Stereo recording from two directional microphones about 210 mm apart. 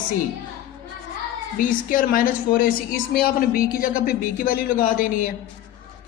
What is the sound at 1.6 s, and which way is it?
A woman's voice, 40° left (ahead or behind).